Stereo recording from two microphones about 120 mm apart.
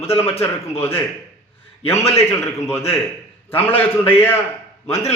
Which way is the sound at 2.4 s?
20° left (ahead or behind).